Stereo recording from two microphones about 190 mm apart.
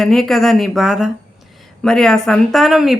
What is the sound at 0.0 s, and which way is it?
Speech, centre (ahead or behind).